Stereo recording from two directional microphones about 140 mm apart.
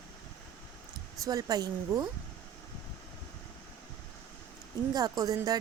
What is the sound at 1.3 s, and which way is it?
Speech, 25° right (ahead or behind).